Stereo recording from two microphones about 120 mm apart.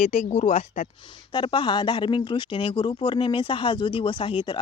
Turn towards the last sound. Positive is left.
turn(degrees=45)  # may be behind; listen again after turning